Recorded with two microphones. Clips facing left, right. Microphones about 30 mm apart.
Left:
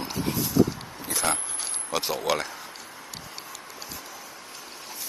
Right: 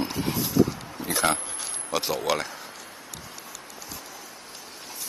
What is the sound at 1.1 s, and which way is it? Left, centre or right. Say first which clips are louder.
Speech: right 3 dB; centre.